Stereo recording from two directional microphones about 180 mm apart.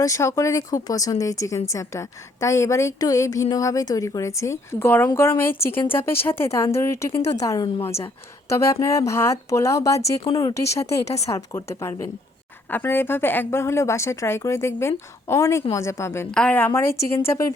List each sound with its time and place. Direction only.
0.0 s a woman's voice: 15° left (ahead or behind)
10.2 s speech: 30° left (ahead or behind)
10.5 s a woman's voice: 15° left (ahead or behind)